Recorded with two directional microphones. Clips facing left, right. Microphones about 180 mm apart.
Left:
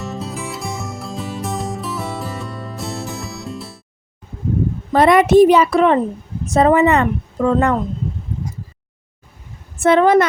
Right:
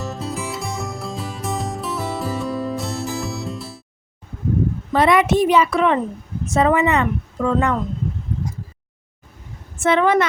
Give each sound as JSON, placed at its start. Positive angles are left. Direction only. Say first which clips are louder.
{"t": 0.0, "sound": "music", "louder": "even", "side_deg": 0}
{"t": 4.9, "sound": "a woman's voice", "louder": "left 5 dB", "side_deg": 40}
{"t": 9.7, "sound": "a woman's voice", "louder": "left 4 dB", "side_deg": 40}